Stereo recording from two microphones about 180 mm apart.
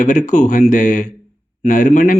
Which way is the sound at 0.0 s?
45° left (ahead or behind).